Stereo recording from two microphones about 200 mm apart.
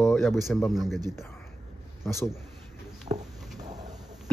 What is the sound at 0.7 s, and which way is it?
Speech, centre (ahead or behind).